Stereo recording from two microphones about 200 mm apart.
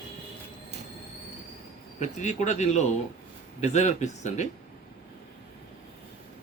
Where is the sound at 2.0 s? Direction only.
35° left (ahead or behind).